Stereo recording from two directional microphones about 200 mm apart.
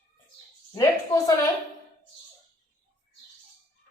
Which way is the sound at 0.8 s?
20° left (ahead or behind).